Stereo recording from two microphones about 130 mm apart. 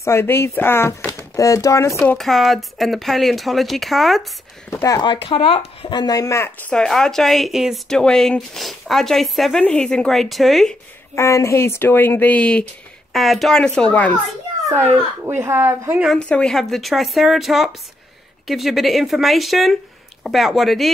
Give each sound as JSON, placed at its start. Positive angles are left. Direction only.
{"t": 0.0, "sound": "speech", "side_deg": 20}
{"t": 2.1, "sound": "a woman's voice", "side_deg": 0}
{"t": 4.7, "sound": "speech", "side_deg": 25}
{"t": 5.1, "sound": "speech", "side_deg": 40}
{"t": 5.9, "sound": "speech", "side_deg": 30}
{"t": 6.7, "sound": "a woman's voice", "side_deg": 5}
{"t": 11.1, "sound": "a woman's voice", "side_deg": 20}
{"t": 15.2, "sound": "speech", "side_deg": -20}
{"t": 16.2, "sound": "a woman's voice", "side_deg": 10}